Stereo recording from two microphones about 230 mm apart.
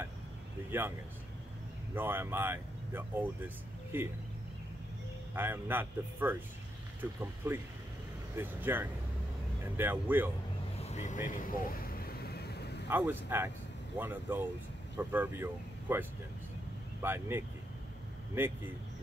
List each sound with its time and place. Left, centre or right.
0.7 s speech: centre
2.0 s speech: centre
5.3 s speech: centre
10.8 s vehicle: left
12.9 s speech: centre